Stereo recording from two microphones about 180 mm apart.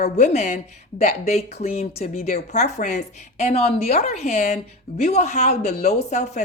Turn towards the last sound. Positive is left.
turn(degrees=40)  # may be behind; listen again after turning